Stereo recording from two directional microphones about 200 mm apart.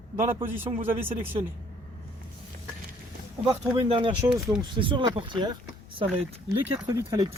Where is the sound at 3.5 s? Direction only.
25° right (ahead or behind).